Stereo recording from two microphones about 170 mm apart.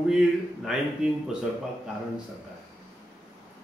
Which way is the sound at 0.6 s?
5° right (ahead or behind).